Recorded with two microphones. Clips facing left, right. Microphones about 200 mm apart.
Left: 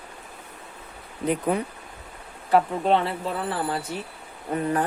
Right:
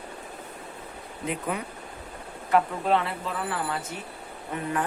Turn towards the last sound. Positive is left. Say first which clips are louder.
# left 5 dB
turn(degrees=40)  # may be behind; listen again after turning